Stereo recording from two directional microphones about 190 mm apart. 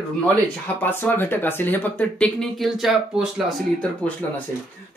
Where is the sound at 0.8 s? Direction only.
10° left (ahead or behind).